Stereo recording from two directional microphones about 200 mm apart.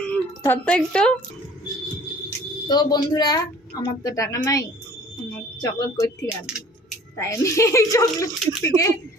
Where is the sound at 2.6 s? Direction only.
20° left (ahead or behind).